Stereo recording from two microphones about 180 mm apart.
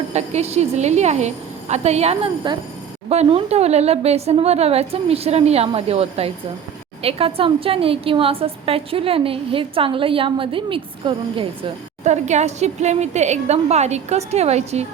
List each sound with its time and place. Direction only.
0.1 s a woman's voice: 40° right (ahead or behind)
12.0 s a woman's voice: 40° right (ahead or behind)